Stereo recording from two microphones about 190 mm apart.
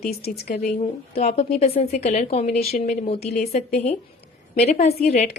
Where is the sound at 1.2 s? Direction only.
35° left (ahead or behind).